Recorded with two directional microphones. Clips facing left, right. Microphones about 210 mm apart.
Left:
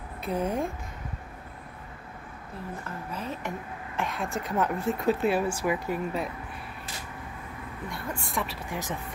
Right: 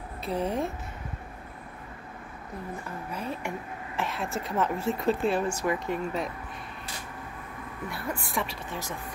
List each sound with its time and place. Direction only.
0.2 s speech: centre (ahead or behind)
3.1 s speech: 10° right (ahead or behind); by 6.2 s 5° left (ahead or behind)
7.9 s speech: centre (ahead or behind)
8.6 s speech: 15° left (ahead or behind)